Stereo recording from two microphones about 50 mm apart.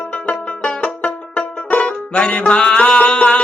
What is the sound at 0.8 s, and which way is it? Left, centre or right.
Music, left.